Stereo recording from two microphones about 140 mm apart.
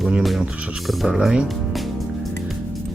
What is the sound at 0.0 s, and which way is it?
Speech, centre (ahead or behind).